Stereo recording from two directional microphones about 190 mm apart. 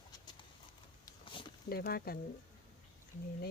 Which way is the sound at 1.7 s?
55° left (ahead or behind).